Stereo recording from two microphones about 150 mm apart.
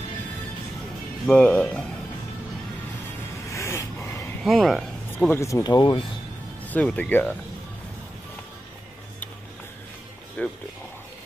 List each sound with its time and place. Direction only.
1.2 s speech: 10° left (ahead or behind)
3.4 s a sound: 20° left (ahead or behind)
4.4 s speech: centre (ahead or behind)
5.3 s speech: 20° left (ahead or behind)
6.6 s speech: 10° left (ahead or behind)
10.4 s speech: 10° left (ahead or behind)